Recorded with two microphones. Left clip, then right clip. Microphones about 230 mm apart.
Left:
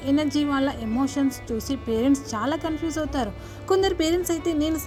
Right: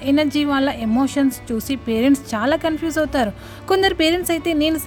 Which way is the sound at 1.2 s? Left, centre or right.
Right.